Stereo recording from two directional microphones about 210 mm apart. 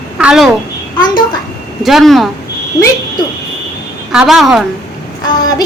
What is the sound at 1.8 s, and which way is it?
Speech, centre (ahead or behind).